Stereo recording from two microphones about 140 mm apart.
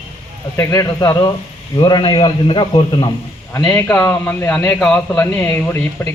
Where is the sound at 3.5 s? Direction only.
25° left (ahead or behind).